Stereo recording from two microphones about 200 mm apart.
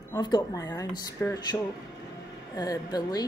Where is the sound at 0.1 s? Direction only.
20° left (ahead or behind).